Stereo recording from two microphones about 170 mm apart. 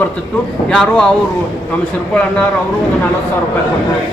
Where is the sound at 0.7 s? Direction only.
5° left (ahead or behind).